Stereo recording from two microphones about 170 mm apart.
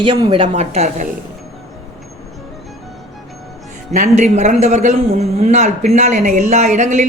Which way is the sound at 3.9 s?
45° right (ahead or behind).